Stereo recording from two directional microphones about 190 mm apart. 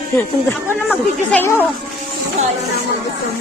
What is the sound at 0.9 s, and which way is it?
Speech, 10° left (ahead or behind).